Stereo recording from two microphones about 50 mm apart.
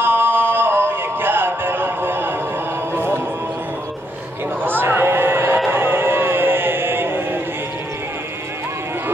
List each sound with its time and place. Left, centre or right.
0.0 s music: right
4.6 s a sound: right
5.7 s music: right